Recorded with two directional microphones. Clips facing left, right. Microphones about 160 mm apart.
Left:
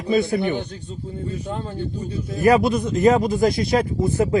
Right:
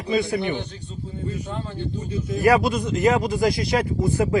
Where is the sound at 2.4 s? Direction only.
20° left (ahead or behind).